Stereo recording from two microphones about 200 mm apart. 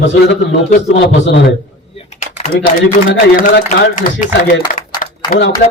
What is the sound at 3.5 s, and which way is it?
Speech, 60° left (ahead or behind).